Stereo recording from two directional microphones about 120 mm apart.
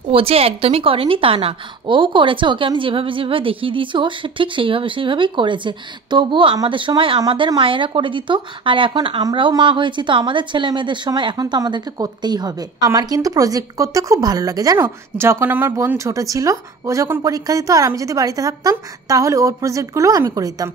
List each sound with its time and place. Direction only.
0.1 s a woman's voice: 50° right (ahead or behind); by 20.7 s 30° right (ahead or behind)